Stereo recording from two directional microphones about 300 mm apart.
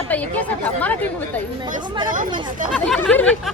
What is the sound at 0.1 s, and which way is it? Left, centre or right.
Speech, centre.